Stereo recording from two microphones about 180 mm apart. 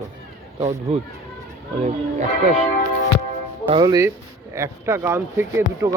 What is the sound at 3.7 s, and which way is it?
Speech, 20° right (ahead or behind).